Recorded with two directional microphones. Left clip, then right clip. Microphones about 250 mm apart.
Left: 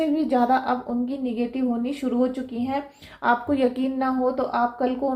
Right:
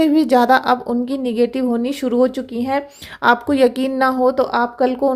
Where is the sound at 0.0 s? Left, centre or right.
Right.